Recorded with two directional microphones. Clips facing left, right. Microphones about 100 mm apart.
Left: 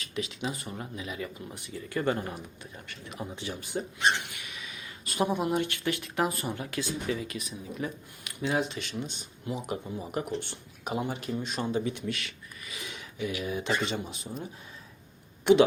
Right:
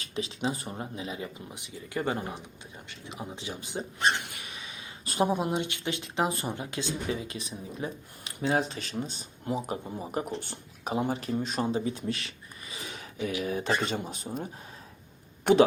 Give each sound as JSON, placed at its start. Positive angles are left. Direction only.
{"t": 0.0, "sound": "speech", "side_deg": -35}
{"t": 4.0, "sound": "dog", "side_deg": -35}
{"t": 5.3, "sound": "speech", "side_deg": -20}